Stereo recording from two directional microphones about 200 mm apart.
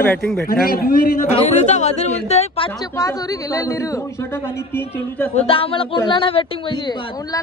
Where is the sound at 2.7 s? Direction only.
15° left (ahead or behind).